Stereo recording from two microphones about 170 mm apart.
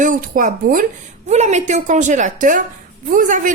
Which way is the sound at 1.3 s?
40° right (ahead or behind).